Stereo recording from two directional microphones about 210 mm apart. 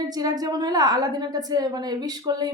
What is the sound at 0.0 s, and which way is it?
A woman's voice, 20° right (ahead or behind).